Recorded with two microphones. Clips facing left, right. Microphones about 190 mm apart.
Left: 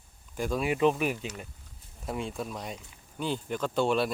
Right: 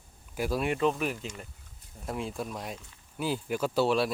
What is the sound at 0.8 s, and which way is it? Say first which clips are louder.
Speech: left 3 dB; 15° left (ahead or behind).